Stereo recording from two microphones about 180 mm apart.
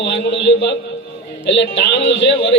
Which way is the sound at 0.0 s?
75° left (ahead or behind).